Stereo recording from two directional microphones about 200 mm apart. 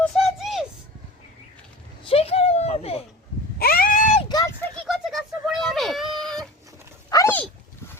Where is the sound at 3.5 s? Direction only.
50° left (ahead or behind).